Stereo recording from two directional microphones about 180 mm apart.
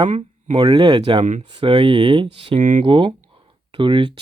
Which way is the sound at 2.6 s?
45° right (ahead or behind).